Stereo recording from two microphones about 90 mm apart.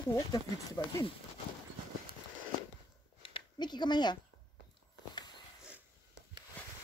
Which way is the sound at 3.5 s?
55° left (ahead or behind).